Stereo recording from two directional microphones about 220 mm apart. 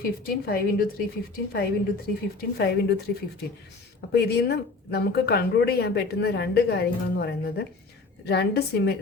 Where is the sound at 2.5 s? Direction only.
45° left (ahead or behind).